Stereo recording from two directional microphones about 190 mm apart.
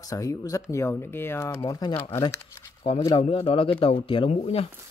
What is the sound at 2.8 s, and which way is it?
Speech, 25° left (ahead or behind).